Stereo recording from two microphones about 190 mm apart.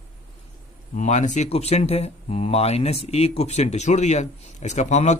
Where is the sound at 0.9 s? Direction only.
40° left (ahead or behind).